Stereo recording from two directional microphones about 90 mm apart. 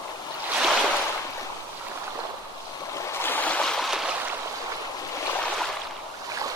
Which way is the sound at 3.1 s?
25° left (ahead or behind).